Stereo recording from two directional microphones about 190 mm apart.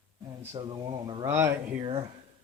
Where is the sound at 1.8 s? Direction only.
25° right (ahead or behind).